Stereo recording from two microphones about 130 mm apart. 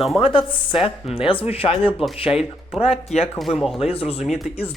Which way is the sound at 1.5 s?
45° left (ahead or behind).